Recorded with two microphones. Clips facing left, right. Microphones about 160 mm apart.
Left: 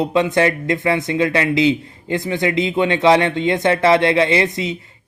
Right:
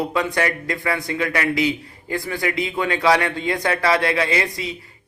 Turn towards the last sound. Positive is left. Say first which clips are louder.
# left 5 dB
turn(degrees=20)  # may be behind; listen again after turning